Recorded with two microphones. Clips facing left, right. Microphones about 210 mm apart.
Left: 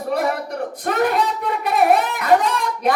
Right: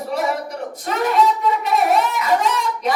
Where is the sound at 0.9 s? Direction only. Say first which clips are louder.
Right 1 dB; 50° left (ahead or behind).